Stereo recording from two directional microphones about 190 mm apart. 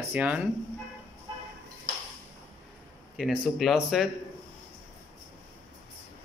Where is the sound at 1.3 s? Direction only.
20° right (ahead or behind).